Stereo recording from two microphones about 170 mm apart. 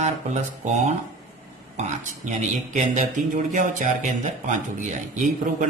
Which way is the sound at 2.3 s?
45° right (ahead or behind).